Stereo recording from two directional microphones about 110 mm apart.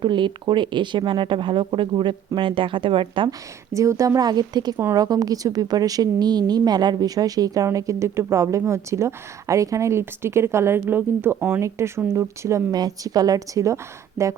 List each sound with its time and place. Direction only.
0.0 s speech: 45° right (ahead or behind)
3.8 s speech: 30° right (ahead or behind)